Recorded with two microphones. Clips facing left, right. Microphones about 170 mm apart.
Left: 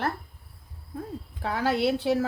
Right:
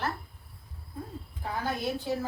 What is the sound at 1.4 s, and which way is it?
Speech, 80° left.